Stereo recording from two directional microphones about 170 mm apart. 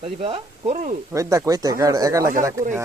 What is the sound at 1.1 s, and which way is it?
Speech, 20° right (ahead or behind).